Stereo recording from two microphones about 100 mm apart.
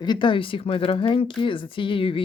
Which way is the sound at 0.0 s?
50° left (ahead or behind).